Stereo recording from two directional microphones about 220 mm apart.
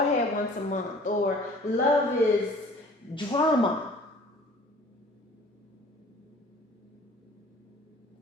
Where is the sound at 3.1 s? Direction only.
20° left (ahead or behind).